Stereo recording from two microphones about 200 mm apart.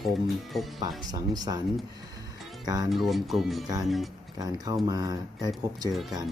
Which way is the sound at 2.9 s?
Centre (ahead or behind).